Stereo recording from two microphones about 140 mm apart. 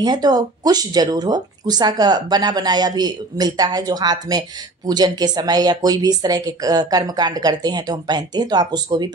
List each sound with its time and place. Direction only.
0.0 s speech: 30° right (ahead or behind)